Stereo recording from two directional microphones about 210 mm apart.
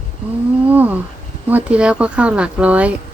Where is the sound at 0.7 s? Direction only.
10° right (ahead or behind).